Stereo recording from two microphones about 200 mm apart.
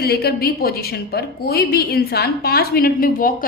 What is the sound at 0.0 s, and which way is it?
A woman's voice, 50° left (ahead or behind).